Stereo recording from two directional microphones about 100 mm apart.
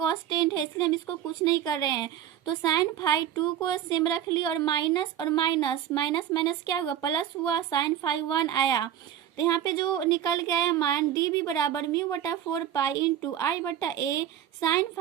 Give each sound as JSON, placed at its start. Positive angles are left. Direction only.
{"t": 0.0, "sound": "speech", "side_deg": 45}